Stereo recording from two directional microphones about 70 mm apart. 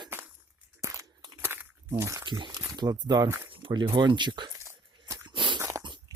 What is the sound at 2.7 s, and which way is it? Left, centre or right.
Speech, right.